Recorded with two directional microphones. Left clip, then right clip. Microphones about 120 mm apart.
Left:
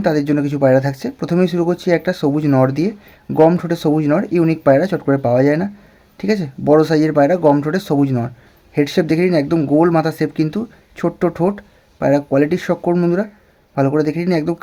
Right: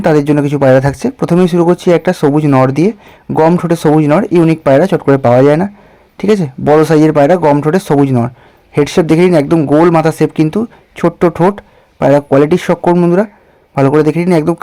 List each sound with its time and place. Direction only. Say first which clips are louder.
0.0 s speech: right 7 dB; 40° right (ahead or behind)